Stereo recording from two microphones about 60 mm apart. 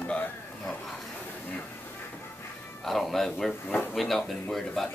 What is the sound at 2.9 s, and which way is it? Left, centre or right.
Speech, centre.